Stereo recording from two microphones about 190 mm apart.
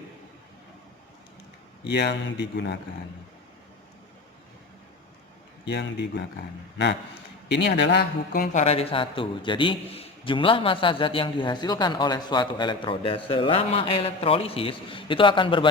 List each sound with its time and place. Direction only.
1.8 s a man's voice: 60° left (ahead or behind)
5.6 s a man's voice: 65° left (ahead or behind)
7.4 s a man's voice: 60° left (ahead or behind)
8.6 s a man's voice: 30° left (ahead or behind)